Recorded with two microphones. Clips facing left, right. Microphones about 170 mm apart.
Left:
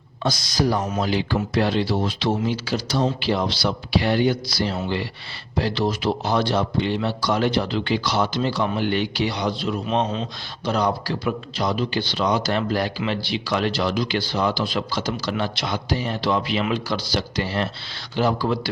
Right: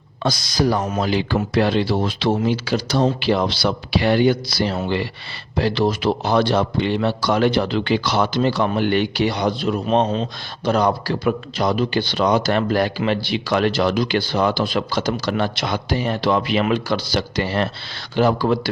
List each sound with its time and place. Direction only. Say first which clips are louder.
0.2 s a man's voice: right 2 dB; 70° right (ahead or behind)